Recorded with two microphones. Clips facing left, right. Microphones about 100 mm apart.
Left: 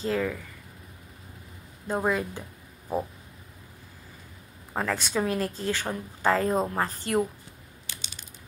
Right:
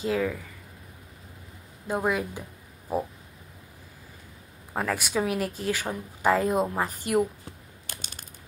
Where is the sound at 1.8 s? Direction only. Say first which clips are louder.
Even; 5° right (ahead or behind).